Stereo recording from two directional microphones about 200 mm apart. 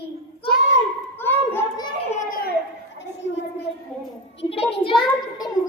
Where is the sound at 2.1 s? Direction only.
40° left (ahead or behind).